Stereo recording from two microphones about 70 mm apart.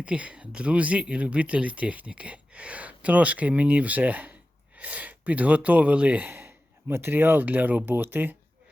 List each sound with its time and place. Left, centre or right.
0.0 s speech: centre